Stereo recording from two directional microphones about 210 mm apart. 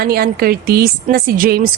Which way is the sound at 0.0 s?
45° right (ahead or behind).